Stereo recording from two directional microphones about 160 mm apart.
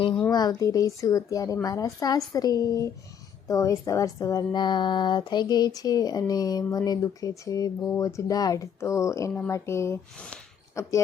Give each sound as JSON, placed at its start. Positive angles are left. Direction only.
{"t": 0.3, "sound": "speech", "side_deg": 25}